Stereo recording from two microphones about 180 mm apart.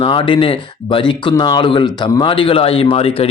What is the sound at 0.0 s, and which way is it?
Speech, 25° left (ahead or behind).